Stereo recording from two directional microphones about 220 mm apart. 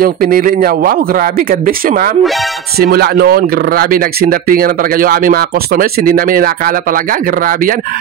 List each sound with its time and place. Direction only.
0.0 s speech: 40° right (ahead or behind)